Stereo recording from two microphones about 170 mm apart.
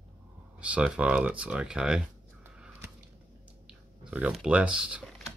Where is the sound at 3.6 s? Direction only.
5° right (ahead or behind).